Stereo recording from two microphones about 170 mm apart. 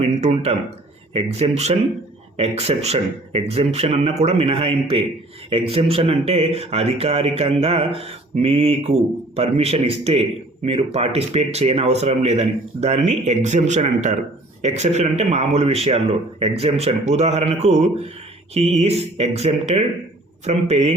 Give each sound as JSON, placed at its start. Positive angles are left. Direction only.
{"t": 0.0, "sound": "speech", "side_deg": -40}